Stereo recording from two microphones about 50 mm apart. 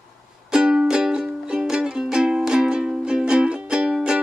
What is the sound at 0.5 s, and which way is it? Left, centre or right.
Music, centre.